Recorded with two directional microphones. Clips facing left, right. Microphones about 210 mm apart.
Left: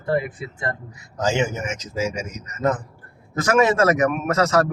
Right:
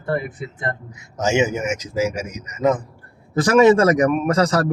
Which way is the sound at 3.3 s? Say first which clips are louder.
Right 5 dB; 30° right (ahead or behind).